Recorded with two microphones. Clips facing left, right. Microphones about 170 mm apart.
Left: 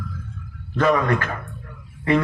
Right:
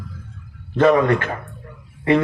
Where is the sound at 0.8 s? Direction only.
25° right (ahead or behind).